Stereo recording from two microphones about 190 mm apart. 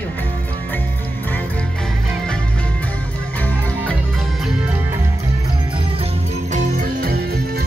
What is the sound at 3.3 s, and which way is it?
Music, 10° left (ahead or behind).